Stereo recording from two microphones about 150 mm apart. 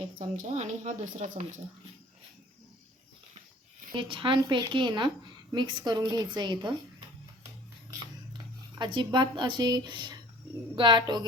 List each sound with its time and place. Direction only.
0.2 s speech: 55° right (ahead or behind)
3.9 s a woman's voice: 35° right (ahead or behind)
8.8 s a woman's voice: 30° right (ahead or behind)